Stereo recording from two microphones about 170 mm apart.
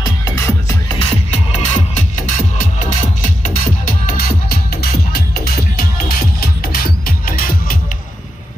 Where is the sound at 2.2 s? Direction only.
50° left (ahead or behind).